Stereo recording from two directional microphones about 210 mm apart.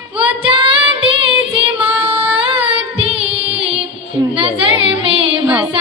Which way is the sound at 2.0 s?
25° right (ahead or behind).